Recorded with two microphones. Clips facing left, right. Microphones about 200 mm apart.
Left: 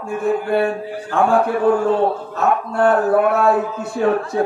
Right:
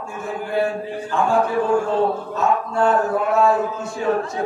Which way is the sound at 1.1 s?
65° left (ahead or behind).